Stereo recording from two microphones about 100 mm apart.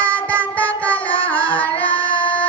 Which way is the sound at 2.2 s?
15° left (ahead or behind).